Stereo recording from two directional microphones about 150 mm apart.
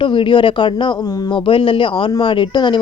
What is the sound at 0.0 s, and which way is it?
Speech, 35° left (ahead or behind).